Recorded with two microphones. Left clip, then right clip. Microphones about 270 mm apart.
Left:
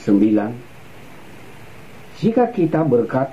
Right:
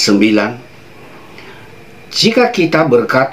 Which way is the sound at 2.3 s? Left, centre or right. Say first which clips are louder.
Right 4 dB; centre.